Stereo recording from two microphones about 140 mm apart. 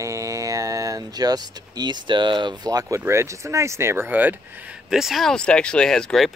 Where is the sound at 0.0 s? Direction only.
20° right (ahead or behind).